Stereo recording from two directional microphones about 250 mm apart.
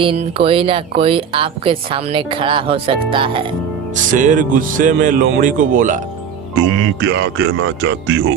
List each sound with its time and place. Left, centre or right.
0.0 s speech: right
4.1 s speech: right
6.6 s speech: right